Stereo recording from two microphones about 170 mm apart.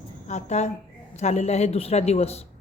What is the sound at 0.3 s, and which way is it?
Speech, 40° left (ahead or behind).